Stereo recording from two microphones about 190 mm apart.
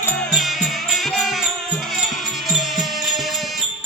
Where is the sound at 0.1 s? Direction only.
Centre (ahead or behind).